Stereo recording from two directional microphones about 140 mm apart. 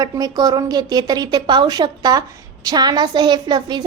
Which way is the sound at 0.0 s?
30° right (ahead or behind).